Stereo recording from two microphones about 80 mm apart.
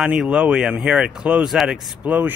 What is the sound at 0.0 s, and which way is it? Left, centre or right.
Speech, centre.